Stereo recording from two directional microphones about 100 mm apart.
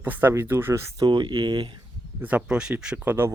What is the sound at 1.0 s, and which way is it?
Speech, 50° right (ahead or behind).